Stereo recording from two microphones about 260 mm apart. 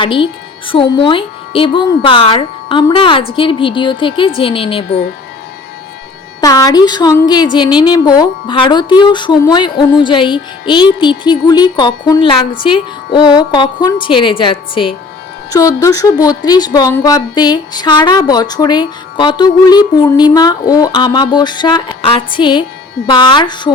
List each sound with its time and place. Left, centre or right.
0.0 s speech: centre
6.4 s a woman's voice: centre